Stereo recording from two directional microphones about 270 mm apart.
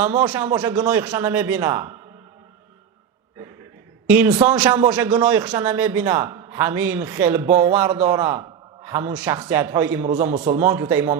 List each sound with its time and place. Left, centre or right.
0.0 s a man's voice: centre
4.1 s a man's voice: centre